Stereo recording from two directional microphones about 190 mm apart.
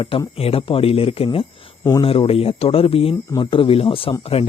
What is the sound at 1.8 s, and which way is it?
Speech, 15° left (ahead or behind).